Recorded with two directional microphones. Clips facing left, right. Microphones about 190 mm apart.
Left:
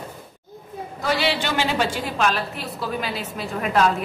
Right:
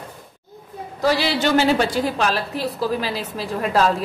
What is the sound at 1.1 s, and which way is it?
A woman's voice, 40° right (ahead or behind).